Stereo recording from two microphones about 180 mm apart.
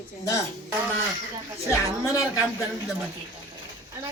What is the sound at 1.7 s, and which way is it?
Speech, 15° left (ahead or behind).